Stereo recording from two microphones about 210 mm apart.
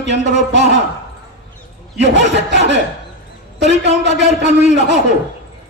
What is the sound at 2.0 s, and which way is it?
Speech, 55° right (ahead or behind).